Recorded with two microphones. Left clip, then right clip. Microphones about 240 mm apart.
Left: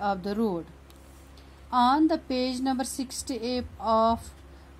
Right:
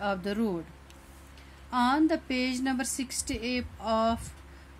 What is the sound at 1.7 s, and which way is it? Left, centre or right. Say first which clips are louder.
Speech: left 4 dB; right.